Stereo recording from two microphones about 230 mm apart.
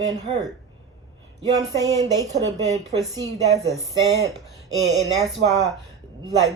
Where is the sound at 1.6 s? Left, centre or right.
Centre.